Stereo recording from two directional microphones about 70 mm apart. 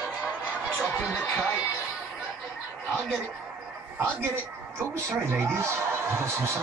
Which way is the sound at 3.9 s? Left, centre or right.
Right.